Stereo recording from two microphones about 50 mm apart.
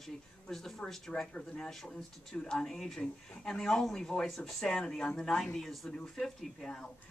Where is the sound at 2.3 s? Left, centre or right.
Centre.